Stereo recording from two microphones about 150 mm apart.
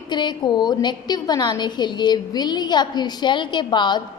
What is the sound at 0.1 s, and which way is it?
A woman's voice, 30° left (ahead or behind).